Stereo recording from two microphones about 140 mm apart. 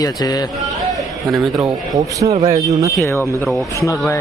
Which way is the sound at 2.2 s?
50° right (ahead or behind).